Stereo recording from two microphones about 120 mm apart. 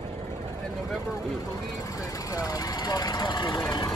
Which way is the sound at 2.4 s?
30° left (ahead or behind).